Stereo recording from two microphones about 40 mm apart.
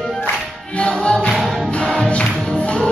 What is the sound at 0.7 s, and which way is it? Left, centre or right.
Music, left.